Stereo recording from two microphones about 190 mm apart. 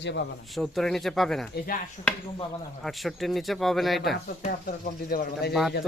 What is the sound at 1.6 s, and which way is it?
Speech, 50° left (ahead or behind).